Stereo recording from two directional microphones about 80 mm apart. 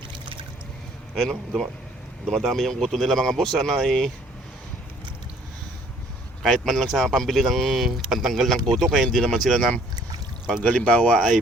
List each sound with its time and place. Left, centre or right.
1.1 s speech: centre
6.4 s speech: centre
11.1 s speech: centre